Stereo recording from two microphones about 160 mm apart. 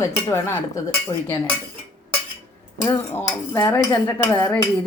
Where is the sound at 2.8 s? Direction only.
15° left (ahead or behind).